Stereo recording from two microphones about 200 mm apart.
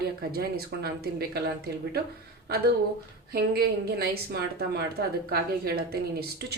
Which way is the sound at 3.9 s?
55° right (ahead or behind).